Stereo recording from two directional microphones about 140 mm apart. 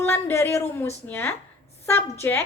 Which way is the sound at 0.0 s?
15° left (ahead or behind).